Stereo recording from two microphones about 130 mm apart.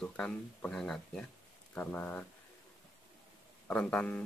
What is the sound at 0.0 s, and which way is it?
Speech, 5° left (ahead or behind).